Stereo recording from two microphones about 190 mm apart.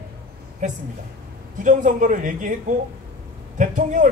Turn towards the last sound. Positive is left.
turn(degrees=-40)  # may be behind; listen again after turning